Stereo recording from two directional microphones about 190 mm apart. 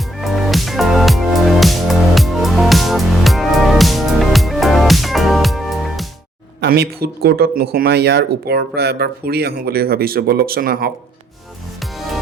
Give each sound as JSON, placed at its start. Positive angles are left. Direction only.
{"t": 0.2, "sound": "music", "side_deg": 0}
{"t": 6.6, "sound": "speech", "side_deg": -55}